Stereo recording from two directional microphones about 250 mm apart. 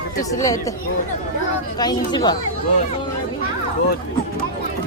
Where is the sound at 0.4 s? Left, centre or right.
Centre.